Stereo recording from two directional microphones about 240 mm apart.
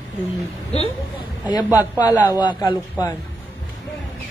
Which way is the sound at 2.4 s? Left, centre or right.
Centre.